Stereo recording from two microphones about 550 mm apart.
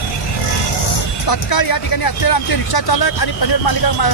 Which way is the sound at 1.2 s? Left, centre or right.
Left.